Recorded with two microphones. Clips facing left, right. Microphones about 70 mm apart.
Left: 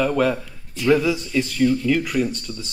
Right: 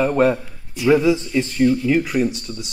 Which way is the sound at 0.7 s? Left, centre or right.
Centre.